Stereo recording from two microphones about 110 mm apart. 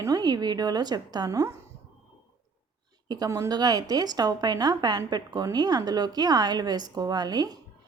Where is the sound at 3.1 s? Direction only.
35° right (ahead or behind).